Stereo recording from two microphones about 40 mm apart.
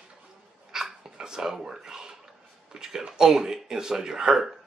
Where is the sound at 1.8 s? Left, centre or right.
Centre.